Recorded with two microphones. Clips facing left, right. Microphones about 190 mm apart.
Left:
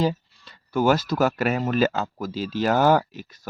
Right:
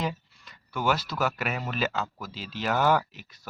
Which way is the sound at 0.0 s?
30° left (ahead or behind).